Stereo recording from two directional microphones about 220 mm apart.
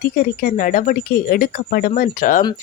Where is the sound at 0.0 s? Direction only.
40° left (ahead or behind).